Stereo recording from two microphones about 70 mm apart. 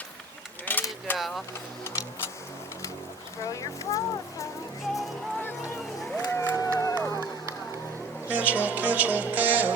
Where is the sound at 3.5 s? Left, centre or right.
Left.